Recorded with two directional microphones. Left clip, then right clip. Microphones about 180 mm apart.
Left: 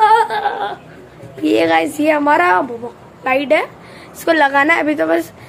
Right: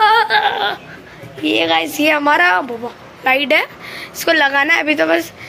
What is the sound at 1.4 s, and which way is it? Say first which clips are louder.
Speech: left 2 dB; 30° left (ahead or behind).